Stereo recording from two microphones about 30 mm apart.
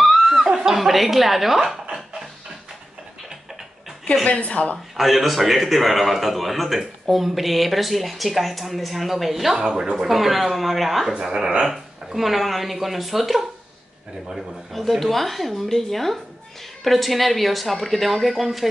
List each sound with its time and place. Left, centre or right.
0.3 s chuckle: centre
0.7 s a woman's voice: centre
4.2 s speech: left
4.9 s a man's voice: centre
9.6 s speech: right
10.0 s a man's voice: centre
11.2 s a man's voice: centre
14.7 s a man's voice: centre